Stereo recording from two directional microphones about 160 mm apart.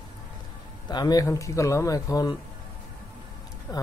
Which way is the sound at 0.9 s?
25° left (ahead or behind).